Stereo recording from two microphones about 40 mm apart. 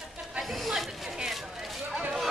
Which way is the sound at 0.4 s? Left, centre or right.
Centre.